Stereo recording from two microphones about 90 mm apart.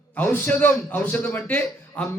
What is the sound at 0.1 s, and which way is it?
A man's voice, 20° left (ahead or behind).